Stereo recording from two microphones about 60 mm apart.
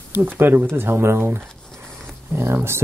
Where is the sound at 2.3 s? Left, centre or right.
Right.